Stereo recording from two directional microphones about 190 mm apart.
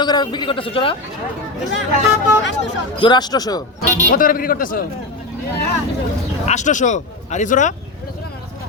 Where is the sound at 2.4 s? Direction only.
70° left (ahead or behind).